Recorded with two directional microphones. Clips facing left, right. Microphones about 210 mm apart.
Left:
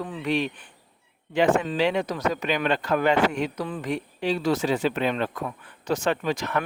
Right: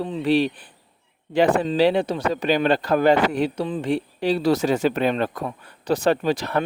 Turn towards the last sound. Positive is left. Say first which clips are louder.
# right 4 dB
turn(degrees=-35)  # may be behind; listen again after turning